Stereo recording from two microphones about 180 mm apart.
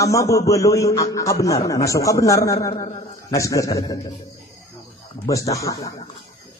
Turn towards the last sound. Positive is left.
turn(degrees=20)  # may be behind; listen again after turning